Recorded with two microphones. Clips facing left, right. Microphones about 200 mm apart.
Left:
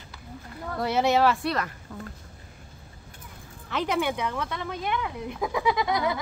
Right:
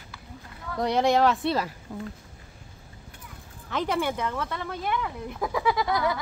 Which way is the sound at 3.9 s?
15° left (ahead or behind).